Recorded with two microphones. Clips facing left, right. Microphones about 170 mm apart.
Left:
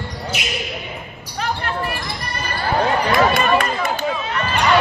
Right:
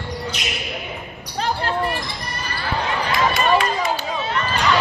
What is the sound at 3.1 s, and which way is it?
Run, 55° left (ahead or behind).